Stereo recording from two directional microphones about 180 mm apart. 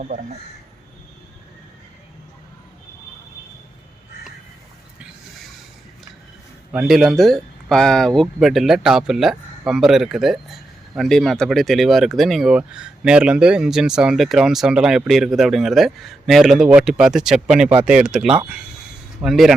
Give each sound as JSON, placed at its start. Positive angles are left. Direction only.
{"t": 0.0, "sound": "speech", "side_deg": -50}
{"t": 6.7, "sound": "speech", "side_deg": 0}